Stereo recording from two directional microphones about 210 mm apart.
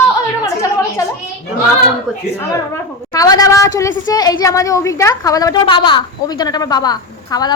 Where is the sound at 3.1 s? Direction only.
15° left (ahead or behind).